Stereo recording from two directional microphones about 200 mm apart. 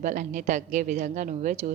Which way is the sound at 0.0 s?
40° right (ahead or behind).